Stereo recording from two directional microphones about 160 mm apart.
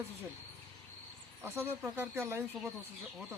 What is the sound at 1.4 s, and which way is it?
Speech, 15° right (ahead or behind).